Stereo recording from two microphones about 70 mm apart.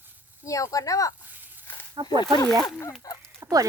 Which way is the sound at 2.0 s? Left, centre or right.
Right.